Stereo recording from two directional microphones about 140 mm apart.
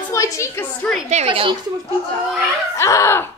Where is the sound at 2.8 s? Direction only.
20° left (ahead or behind).